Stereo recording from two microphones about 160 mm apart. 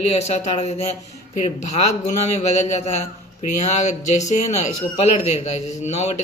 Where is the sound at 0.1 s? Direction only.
45° left (ahead or behind).